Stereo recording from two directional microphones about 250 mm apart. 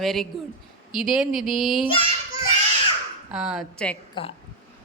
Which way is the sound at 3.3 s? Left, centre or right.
Centre.